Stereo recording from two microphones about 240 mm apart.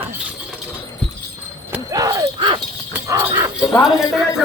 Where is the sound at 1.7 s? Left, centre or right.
Centre.